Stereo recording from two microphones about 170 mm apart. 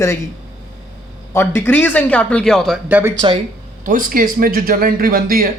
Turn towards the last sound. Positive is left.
turn(degrees=-60)  # may be behind; listen again after turning